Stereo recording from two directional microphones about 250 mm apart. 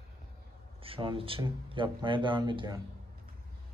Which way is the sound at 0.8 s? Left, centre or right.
Right.